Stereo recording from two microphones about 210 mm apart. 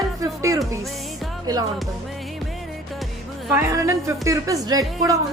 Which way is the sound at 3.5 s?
10° right (ahead or behind).